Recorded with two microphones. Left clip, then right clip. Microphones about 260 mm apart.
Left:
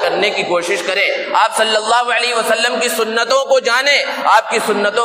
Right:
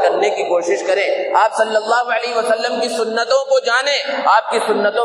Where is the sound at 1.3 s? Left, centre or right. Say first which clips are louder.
Even; left.